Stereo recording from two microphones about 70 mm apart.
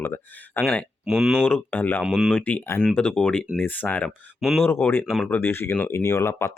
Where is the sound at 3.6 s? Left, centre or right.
Left.